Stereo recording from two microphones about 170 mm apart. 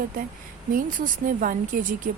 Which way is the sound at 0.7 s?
50° right (ahead or behind).